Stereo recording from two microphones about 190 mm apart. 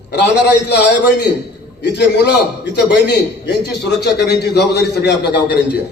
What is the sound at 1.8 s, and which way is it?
A man's voice, 65° left (ahead or behind).